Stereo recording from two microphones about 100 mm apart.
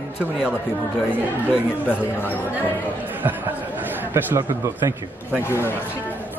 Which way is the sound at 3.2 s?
20° right (ahead or behind).